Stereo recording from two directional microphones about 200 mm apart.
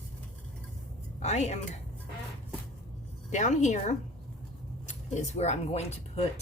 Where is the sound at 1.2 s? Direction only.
35° left (ahead or behind).